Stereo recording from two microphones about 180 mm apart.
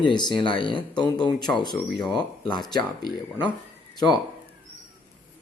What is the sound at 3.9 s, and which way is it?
Speech, 25° left (ahead or behind).